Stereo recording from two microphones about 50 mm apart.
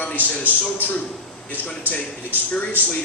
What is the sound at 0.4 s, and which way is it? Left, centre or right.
Speech, left.